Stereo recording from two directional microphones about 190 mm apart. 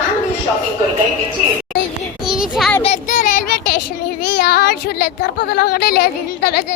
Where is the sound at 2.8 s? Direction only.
40° left (ahead or behind).